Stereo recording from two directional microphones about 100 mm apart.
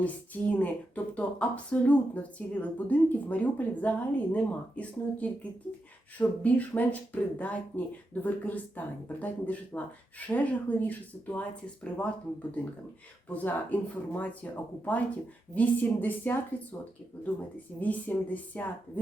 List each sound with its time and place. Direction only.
0.0 s speech: 15° left (ahead or behind)
17.7 s speech: 15° left (ahead or behind)